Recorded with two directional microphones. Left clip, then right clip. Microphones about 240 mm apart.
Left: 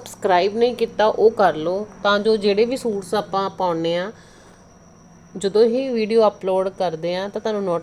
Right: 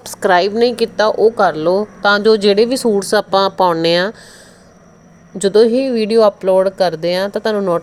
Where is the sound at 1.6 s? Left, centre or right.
Right.